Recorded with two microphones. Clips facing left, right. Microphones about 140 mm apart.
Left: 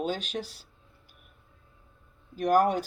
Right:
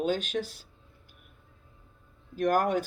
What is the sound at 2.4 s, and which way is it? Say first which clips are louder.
Speech: left 2 dB; 50° right (ahead or behind).